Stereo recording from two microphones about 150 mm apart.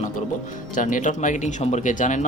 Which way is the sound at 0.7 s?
60° left (ahead or behind).